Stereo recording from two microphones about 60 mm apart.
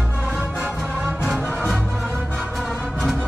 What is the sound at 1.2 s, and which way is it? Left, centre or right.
Music, centre.